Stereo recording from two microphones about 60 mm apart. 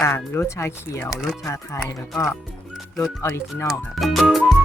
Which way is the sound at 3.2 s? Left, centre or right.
Left.